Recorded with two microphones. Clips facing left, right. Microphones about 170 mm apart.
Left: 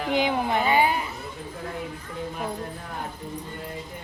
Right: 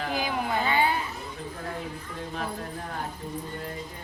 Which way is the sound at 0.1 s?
20° left (ahead or behind).